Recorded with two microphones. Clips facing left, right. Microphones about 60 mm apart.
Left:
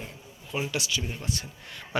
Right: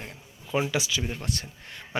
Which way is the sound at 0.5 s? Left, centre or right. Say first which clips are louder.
Right 5 dB; right.